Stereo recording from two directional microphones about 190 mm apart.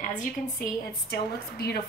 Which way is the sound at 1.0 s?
55° left (ahead or behind).